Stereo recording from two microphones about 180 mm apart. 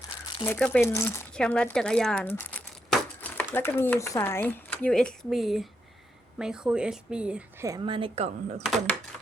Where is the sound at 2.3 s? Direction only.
10° left (ahead or behind).